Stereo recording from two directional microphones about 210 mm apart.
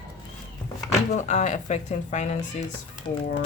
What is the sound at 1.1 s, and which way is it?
Speech, 35° left (ahead or behind).